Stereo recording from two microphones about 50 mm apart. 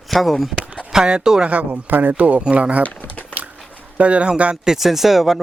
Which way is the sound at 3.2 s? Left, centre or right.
Right.